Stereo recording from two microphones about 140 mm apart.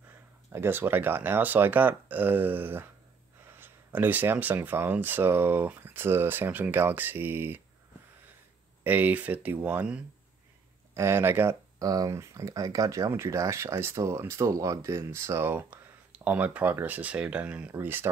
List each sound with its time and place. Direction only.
0.5 s speech: 15° right (ahead or behind)
8.8 s speech: 10° right (ahead or behind)